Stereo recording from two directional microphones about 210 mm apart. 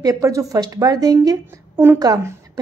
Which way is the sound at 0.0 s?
15° right (ahead or behind).